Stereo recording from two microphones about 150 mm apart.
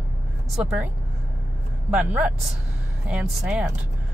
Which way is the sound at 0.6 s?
5° right (ahead or behind).